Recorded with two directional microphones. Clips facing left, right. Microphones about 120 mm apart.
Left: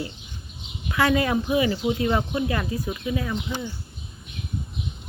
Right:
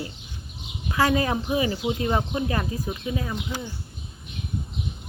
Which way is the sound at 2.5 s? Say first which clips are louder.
Left 1 dB; 35° right (ahead or behind).